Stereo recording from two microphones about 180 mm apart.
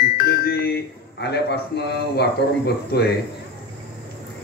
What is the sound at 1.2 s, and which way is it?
A man's voice, 65° left (ahead or behind).